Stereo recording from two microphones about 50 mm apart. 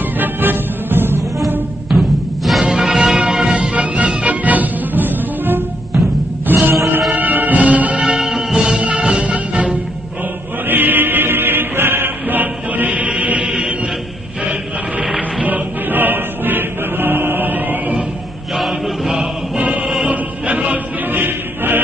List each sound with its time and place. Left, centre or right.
0.2 s music: right
1.9 s music: centre
3.7 s music: right
8.0 s music: centre
10.7 s music: right; by 13.7 s centre
15.4 s music: right
20.1 s music: right
21.1 s music: right